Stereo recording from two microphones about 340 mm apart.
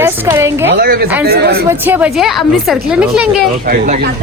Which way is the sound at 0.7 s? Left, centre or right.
Right.